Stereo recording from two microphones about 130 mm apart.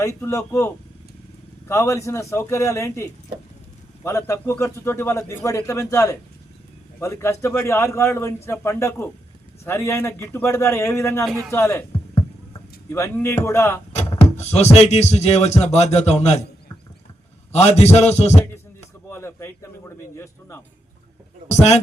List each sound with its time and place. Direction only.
0.0 s a man's voice: 25° left (ahead or behind)
12.9 s a man's voice: 20° left (ahead or behind)
14.2 s speech: 55° left (ahead or behind)
17.5 s speech: 55° left (ahead or behind)
19.0 s a man's voice: 20° left (ahead or behind)
21.5 s speech: 60° left (ahead or behind)